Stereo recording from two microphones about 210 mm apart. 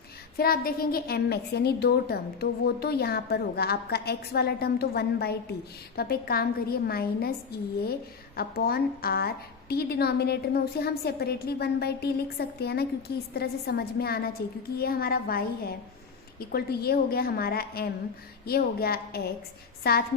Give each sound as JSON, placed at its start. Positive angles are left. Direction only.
{"t": 0.3, "sound": "a woman's voice", "side_deg": 45}